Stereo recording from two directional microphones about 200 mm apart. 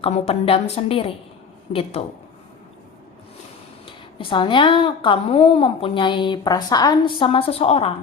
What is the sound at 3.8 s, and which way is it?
A woman's voice, 25° left (ahead or behind).